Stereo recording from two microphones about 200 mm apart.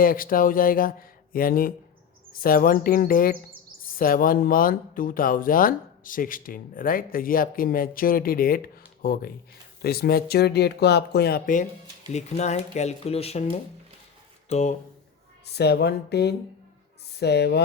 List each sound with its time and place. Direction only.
0.0 s speech: 45° left (ahead or behind)
12.1 s speech: 35° left (ahead or behind)
15.5 s speech: 55° left (ahead or behind)